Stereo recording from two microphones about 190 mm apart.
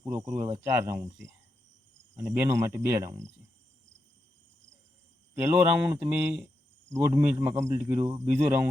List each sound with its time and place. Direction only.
0.0 s speech: 15° right (ahead or behind)
2.1 s speech: 10° right (ahead or behind)
5.3 s speech: 10° right (ahead or behind)
8.1 s speech: 35° right (ahead or behind)